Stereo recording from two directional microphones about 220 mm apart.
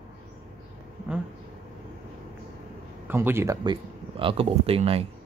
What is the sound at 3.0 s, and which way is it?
Speech, 10° right (ahead or behind).